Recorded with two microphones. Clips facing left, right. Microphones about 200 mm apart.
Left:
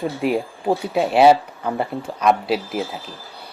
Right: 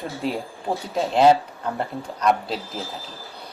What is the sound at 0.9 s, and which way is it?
Speech, 15° left (ahead or behind).